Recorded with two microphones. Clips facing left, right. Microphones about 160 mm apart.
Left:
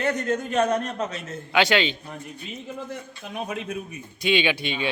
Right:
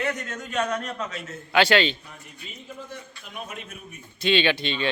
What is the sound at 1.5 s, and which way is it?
Speech, 15° left (ahead or behind).